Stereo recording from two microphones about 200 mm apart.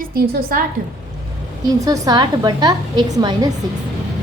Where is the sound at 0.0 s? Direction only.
45° right (ahead or behind).